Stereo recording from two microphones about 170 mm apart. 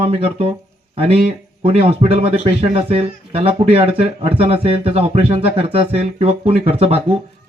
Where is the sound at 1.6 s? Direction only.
35° right (ahead or behind).